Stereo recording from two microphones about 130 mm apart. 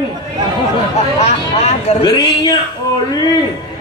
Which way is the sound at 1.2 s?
60° left (ahead or behind).